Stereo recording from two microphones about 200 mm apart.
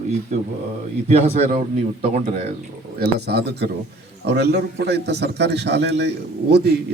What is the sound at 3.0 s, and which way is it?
A man's voice, 55° right (ahead or behind).